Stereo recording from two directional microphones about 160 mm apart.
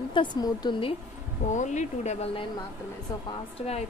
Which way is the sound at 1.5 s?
50° left (ahead or behind).